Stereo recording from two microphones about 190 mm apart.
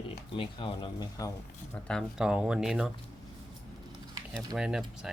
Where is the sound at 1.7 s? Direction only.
5° left (ahead or behind).